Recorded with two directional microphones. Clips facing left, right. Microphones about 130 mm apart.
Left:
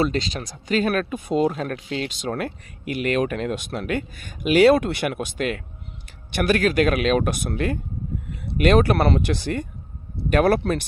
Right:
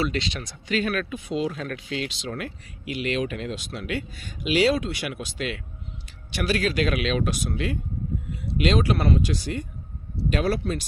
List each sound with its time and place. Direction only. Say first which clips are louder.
0.0 s speech: left 4 dB; 40° left (ahead or behind); by 10.8 s 60° left (ahead or behind)